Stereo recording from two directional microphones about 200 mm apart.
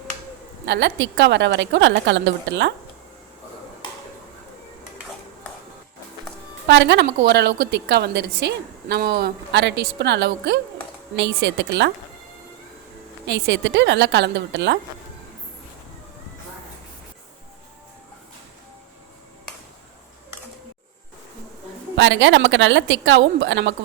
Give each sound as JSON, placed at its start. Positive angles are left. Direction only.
{"t": 0.6, "sound": "a woman's voice", "side_deg": -60}
{"t": 6.7, "sound": "a woman's voice", "side_deg": -65}
{"t": 13.2, "sound": "a woman's voice", "side_deg": -60}
{"t": 21.9, "sound": "a woman's voice", "side_deg": -65}